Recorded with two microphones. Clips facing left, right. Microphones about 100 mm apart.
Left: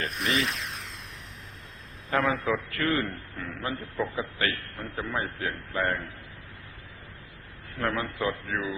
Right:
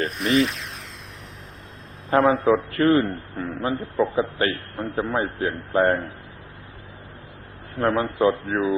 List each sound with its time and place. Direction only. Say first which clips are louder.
0.0 s speech: right 8 dB; centre (ahead or behind)
2.0 s a man's voice: right 8 dB; 35° right (ahead or behind)
2.3 s a man's voice: right 9 dB; centre (ahead or behind)
2.6 s a man's voice: right 9 dB; 35° right (ahead or behind)
7.8 s a man's voice: right 9 dB; 35° right (ahead or behind)